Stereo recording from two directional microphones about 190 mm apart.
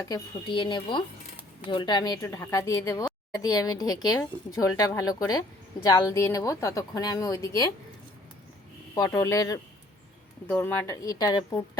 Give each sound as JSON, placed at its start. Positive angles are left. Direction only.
{"t": 0.0, "sound": "a woman's voice", "side_deg": 20}
{"t": 9.0, "sound": "a woman's voice", "side_deg": 15}